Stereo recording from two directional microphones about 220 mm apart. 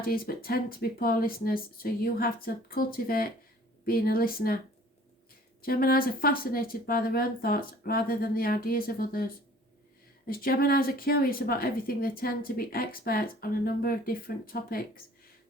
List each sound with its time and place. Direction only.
0.0 s a woman's voice: 40° left (ahead or behind)
5.6 s a woman's voice: 40° left (ahead or behind)